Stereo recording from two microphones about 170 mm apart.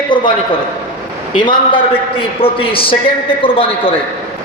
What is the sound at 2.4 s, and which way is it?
A man's voice, 30° left (ahead or behind).